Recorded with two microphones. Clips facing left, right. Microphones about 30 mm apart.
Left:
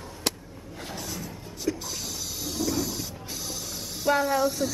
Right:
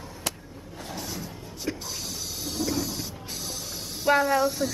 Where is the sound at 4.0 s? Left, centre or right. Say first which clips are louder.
Right 2 dB; centre.